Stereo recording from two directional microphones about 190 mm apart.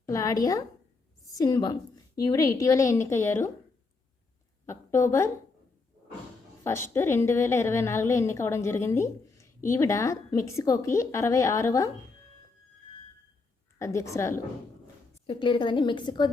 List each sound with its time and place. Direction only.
0.0 s a woman's voice: 15° left (ahead or behind)
4.6 s a woman's voice: 15° left (ahead or behind)
6.7 s a woman's voice: 15° left (ahead or behind)
13.7 s a woman's voice: 15° left (ahead or behind)